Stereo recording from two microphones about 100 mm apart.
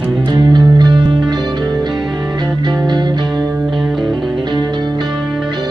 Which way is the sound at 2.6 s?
45° right (ahead or behind).